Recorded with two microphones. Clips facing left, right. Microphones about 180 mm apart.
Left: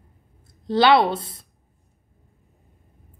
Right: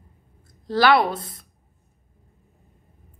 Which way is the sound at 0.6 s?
25° left (ahead or behind).